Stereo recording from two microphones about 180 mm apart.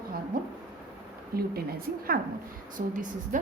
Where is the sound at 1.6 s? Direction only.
55° right (ahead or behind).